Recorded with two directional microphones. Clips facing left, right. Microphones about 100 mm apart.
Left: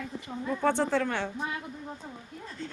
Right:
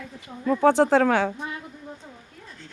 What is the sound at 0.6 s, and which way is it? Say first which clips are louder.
Speech: right 9 dB; 90° right.